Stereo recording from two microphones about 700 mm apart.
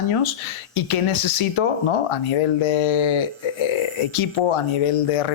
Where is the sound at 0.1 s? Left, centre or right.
Left.